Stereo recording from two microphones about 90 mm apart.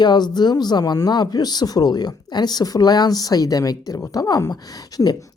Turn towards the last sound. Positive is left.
turn(degrees=45)  # may be behind; listen again after turning